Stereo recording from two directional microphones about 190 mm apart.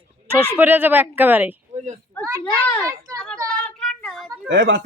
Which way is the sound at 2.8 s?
15° right (ahead or behind).